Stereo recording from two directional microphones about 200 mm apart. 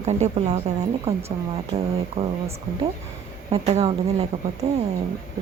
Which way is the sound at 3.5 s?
30° right (ahead or behind).